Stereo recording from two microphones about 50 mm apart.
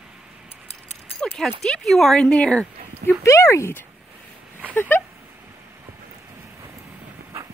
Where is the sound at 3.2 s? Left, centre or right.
Left.